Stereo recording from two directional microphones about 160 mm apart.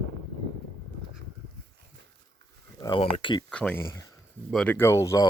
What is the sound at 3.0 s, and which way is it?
Speech, 30° left (ahead or behind).